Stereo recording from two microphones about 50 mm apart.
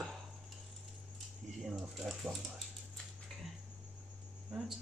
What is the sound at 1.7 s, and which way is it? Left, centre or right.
Speech, centre.